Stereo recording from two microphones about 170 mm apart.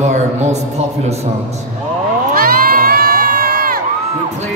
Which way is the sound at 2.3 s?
60° right (ahead or behind).